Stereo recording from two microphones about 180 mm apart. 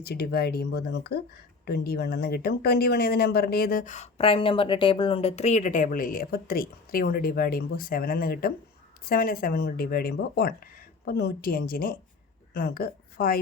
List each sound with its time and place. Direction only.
0.0 s a woman's voice: 60° left (ahead or behind)